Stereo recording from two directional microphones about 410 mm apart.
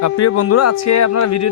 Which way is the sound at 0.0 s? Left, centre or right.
Left.